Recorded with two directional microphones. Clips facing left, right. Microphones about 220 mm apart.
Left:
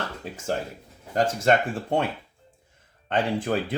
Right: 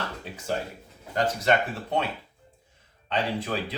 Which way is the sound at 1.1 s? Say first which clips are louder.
Left 3 dB; 50° left (ahead or behind).